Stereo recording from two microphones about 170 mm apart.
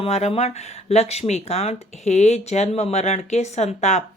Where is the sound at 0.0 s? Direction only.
40° left (ahead or behind).